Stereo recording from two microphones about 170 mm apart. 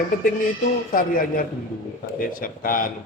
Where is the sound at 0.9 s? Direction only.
55° left (ahead or behind).